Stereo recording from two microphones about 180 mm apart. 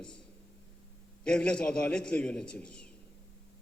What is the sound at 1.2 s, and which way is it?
A man's voice, 5° left (ahead or behind).